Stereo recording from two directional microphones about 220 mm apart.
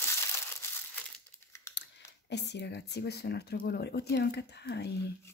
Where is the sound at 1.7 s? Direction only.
50° left (ahead or behind).